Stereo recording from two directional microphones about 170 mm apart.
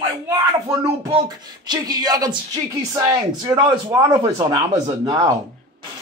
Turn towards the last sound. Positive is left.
turn(degrees=-25)  # may be behind; listen again after turning